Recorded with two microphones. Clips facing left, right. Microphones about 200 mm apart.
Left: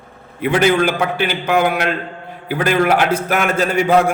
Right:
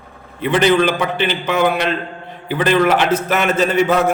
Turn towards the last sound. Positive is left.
turn(degrees=10)  # may be behind; listen again after turning